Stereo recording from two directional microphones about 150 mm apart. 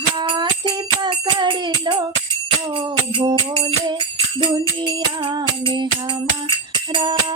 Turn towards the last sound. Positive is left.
turn(degrees=-30)  # may be behind; listen again after turning